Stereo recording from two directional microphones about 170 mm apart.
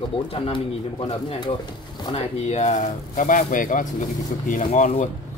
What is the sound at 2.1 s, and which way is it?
Speech, 40° left (ahead or behind).